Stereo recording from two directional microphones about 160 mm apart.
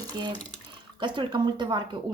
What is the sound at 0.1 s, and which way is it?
A woman's voice, 30° right (ahead or behind).